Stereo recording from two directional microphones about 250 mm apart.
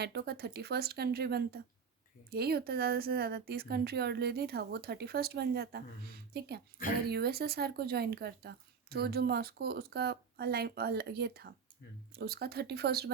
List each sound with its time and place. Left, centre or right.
0.0 s speech: right